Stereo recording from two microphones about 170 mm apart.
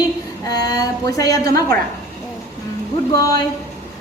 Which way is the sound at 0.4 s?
20° left (ahead or behind).